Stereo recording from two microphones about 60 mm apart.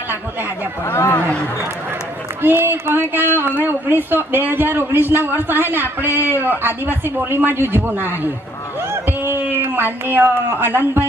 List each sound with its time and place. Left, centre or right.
0.9 s speech: left
2.4 s speech: right
8.9 s a sound: right